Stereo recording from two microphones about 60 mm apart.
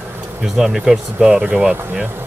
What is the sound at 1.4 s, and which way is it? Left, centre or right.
Speech, right.